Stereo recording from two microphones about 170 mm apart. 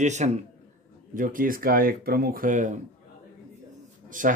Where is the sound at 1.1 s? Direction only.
55° right (ahead or behind).